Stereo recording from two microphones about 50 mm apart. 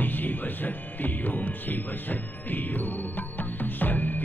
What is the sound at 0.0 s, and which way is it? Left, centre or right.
Speech, left.